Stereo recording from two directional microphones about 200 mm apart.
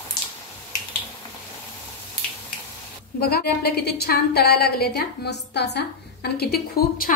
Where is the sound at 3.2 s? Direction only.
50° left (ahead or behind).